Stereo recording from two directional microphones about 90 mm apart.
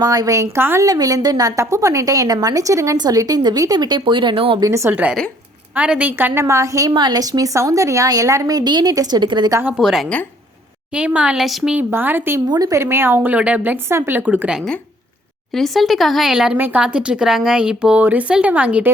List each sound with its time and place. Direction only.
0.0 s a woman's voice: 45° right (ahead or behind); by 0.9 s 30° right (ahead or behind)
0.9 s a woman's voice: 40° right (ahead or behind); by 4.6 s 70° right (ahead or behind)
4.6 s a woman's voice: 30° right (ahead or behind)
5.7 s a woman's voice: 15° right (ahead or behind); by 6.9 s 35° right (ahead or behind)
6.9 s a woman's voice: 55° right (ahead or behind)
9.7 s speech: centre (ahead or behind)
10.9 s speech: 15° right (ahead or behind)
11.8 s a woman's voice: 25° right (ahead or behind)
12.5 s a woman's voice: 45° right (ahead or behind)
12.8 s a woman's voice: 25° right (ahead or behind)
15.5 s speech: centre (ahead or behind)
16.6 s a woman's voice: 20° right (ahead or behind)
16.8 s speech: 10° right (ahead or behind)